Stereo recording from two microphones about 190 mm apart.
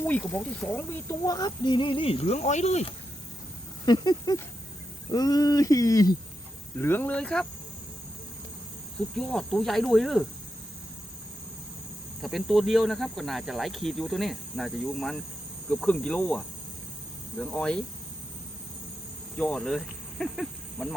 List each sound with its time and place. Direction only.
0.0 s speech: 5° left (ahead or behind); by 2.9 s 35° left (ahead or behind)
3.8 s speech: 20° left (ahead or behind)
6.7 s cricket: 10° left (ahead or behind)
9.1 s speech: 5° left (ahead or behind)
12.2 s speech: centre (ahead or behind)
15.7 s cricket: 5° left (ahead or behind)
17.4 s speech: 5° left (ahead or behind)
19.4 s speech: 5° left (ahead or behind)